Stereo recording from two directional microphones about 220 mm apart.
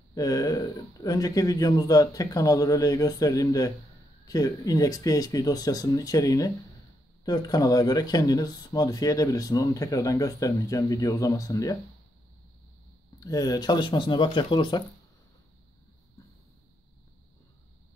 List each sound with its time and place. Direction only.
0.1 s speech: 15° left (ahead or behind)
13.2 s speech: 15° left (ahead or behind)